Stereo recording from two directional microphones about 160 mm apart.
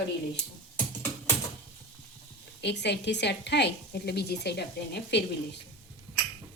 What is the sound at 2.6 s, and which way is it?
A woman's voice, 90° left.